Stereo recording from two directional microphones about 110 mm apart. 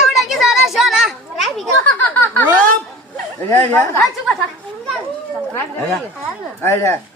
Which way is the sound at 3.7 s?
25° left (ahead or behind).